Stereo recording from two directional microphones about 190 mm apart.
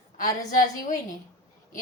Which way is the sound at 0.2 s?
45° left (ahead or behind).